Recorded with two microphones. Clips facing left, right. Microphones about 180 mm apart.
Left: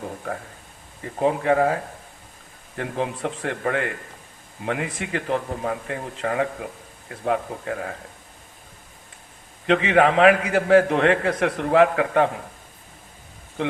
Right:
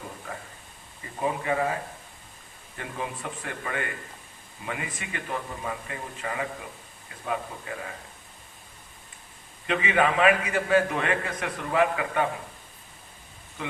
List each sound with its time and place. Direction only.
1.0 s a man's voice: 65° left (ahead or behind)
5.5 s speech: 60° left (ahead or behind)
9.6 s a man's voice: 70° left (ahead or behind)